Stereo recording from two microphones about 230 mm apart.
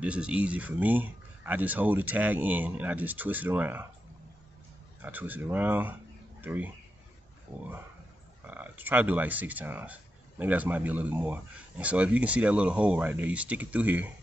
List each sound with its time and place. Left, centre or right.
0.0 s speech: centre
5.0 s speech: centre
8.5 s speech: centre